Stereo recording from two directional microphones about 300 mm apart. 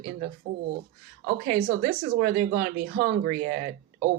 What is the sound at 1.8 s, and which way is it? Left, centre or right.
Speech, right.